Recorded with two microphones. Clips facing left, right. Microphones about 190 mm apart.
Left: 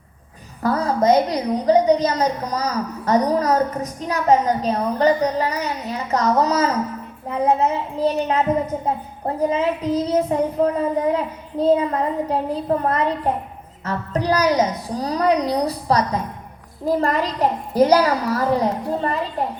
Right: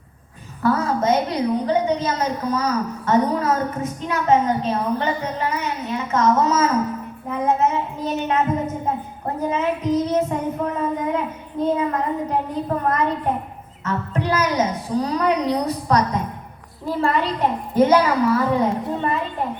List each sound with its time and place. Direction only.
0.6 s a woman's voice: 35° left (ahead or behind)